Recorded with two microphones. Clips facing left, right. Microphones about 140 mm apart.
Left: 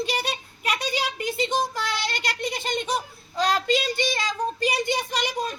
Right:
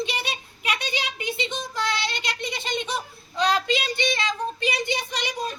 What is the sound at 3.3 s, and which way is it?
Child singing, 45° left (ahead or behind).